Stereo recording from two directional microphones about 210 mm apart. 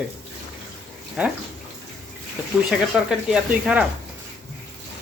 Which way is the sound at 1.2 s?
5° right (ahead or behind).